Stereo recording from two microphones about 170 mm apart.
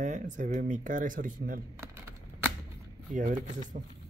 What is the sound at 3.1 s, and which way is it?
Speech, 50° right (ahead or behind).